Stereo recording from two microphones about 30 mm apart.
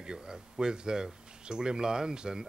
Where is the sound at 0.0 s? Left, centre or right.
Right.